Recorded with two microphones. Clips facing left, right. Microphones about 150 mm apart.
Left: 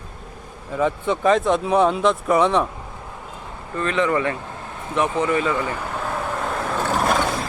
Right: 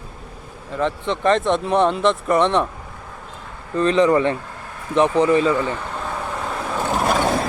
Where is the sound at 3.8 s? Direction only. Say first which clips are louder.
Right 5 dB; 30° right (ahead or behind).